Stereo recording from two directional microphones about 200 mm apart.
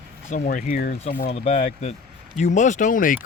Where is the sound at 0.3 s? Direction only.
40° left (ahead or behind).